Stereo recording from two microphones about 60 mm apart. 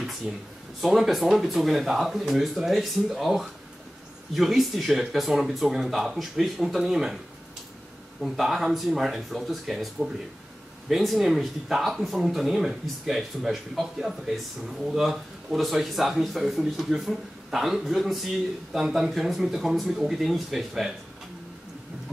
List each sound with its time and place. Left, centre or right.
0.3 s speech: centre
0.7 s speech: centre
8.2 s speech: centre